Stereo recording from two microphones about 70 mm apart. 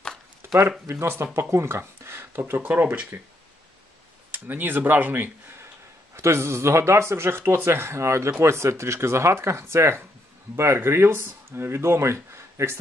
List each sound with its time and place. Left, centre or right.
0.6 s speech: right
4.3 s speech: right
6.1 s speech: right